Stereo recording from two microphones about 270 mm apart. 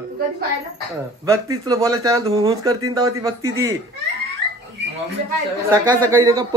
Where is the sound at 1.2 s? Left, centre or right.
Centre.